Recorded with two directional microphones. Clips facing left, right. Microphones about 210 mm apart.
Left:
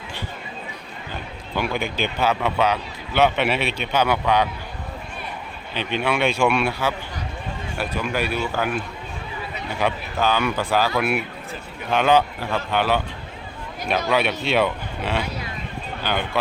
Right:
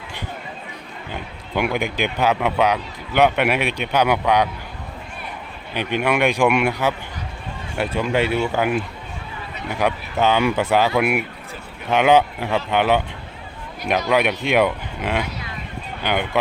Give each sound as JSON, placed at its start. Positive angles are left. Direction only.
{"t": 1.5, "sound": "speech", "side_deg": -20}
{"t": 5.7, "sound": "speech", "side_deg": -10}
{"t": 14.1, "sound": "speech", "side_deg": -15}